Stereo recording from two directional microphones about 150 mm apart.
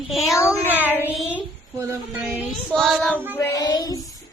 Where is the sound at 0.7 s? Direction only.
10° right (ahead or behind).